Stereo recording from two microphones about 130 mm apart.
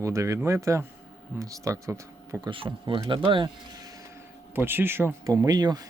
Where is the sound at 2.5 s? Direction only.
40° right (ahead or behind).